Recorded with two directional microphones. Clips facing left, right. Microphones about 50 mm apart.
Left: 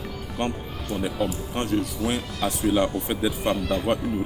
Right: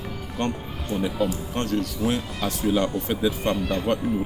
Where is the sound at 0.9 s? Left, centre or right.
Right.